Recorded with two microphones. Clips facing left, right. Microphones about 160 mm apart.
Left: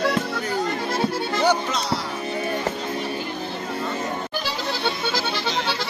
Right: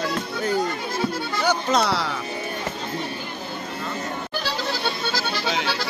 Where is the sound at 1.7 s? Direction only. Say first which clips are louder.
Right 4 dB; 65° right (ahead or behind).